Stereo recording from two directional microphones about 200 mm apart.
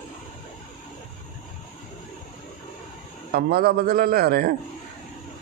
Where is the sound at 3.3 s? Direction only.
50° right (ahead or behind).